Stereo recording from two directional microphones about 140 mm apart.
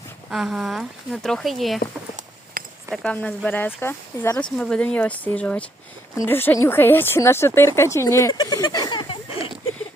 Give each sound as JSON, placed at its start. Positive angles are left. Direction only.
{"t": 0.3, "sound": "speech", "side_deg": -5}
{"t": 2.6, "sound": "a sound", "side_deg": -90}
{"t": 2.9, "sound": "speech", "side_deg": 5}
{"t": 4.5, "sound": "a woman's voice", "side_deg": 5}